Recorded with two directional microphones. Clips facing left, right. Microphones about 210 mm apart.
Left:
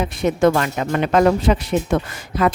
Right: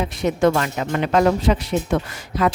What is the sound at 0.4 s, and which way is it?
Speech, 50° left (ahead or behind).